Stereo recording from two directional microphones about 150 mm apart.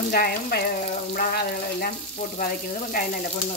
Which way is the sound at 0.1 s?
90° left.